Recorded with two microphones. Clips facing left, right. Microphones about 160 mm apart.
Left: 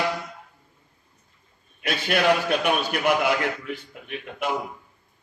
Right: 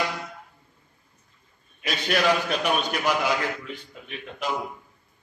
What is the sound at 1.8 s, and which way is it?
A man's voice, 60° left (ahead or behind).